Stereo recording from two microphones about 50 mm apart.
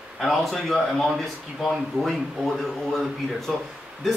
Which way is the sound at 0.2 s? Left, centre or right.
Centre.